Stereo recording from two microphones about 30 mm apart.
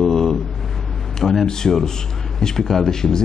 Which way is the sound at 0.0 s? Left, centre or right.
Centre.